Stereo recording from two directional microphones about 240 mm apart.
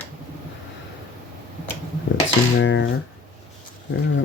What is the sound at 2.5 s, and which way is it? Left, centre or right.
Speech, left.